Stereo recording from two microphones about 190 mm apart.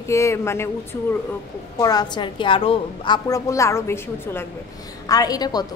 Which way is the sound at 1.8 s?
20° left (ahead or behind).